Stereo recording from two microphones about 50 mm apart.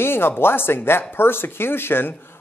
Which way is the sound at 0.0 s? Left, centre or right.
Left.